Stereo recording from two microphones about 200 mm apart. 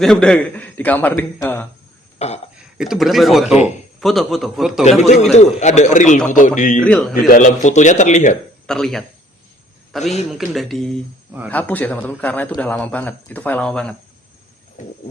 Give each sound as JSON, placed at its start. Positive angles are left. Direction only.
{"t": 0.0, "sound": "a man's voice", "side_deg": 0}
{"t": 2.1, "sound": "burping", "side_deg": 35}
{"t": 2.7, "sound": "a man's voice", "side_deg": 0}
{"t": 4.8, "sound": "speech", "side_deg": 35}
{"t": 6.8, "sound": "a man's voice", "side_deg": 5}
{"t": 7.3, "sound": "speech", "side_deg": 40}
{"t": 8.6, "sound": "speech", "side_deg": 0}
{"t": 10.0, "sound": "speech", "side_deg": 35}
{"t": 10.2, "sound": "a man's voice", "side_deg": 0}
{"t": 11.5, "sound": "a man's voice", "side_deg": 10}